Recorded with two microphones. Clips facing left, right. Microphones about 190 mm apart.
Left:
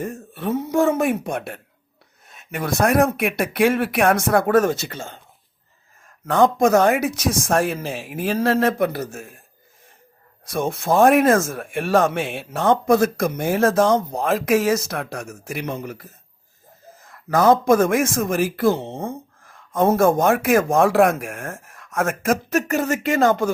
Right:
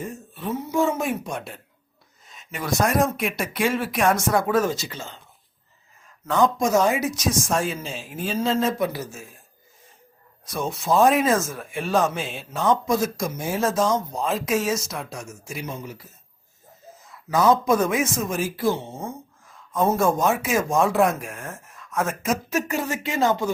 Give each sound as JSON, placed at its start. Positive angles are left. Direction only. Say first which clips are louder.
{"t": 0.0, "sound": "speech", "louder": "left 5 dB", "side_deg": 65}
{"t": 6.2, "sound": "speech", "louder": "left 4 dB", "side_deg": 60}
{"t": 10.4, "sound": "speech", "louder": "left 4 dB", "side_deg": 55}
{"t": 18.8, "sound": "speech", "louder": "left 5 dB", "side_deg": 35}
{"t": 19.0, "sound": "speech", "louder": "left 4 dB", "side_deg": 65}